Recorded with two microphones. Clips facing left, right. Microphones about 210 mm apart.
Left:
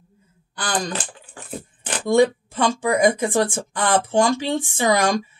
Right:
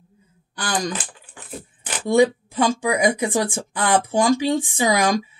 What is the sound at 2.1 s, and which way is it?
Speech, 15° right (ahead or behind).